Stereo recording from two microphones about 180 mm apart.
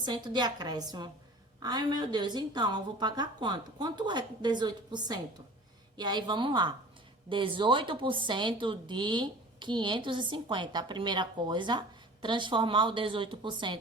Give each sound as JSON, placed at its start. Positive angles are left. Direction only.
{"t": 0.0, "sound": "speech", "side_deg": -25}